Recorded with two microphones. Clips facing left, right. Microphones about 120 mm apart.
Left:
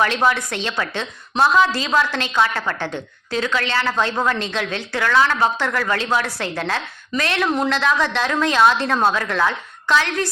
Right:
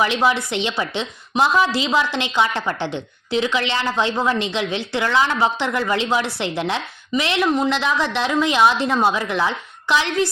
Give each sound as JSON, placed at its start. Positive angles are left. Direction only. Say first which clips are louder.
{"t": 0.0, "sound": "a woman's voice", "louder": "even", "side_deg": -10}